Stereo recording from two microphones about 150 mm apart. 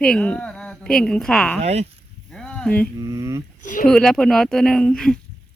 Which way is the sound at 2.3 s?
5° left (ahead or behind).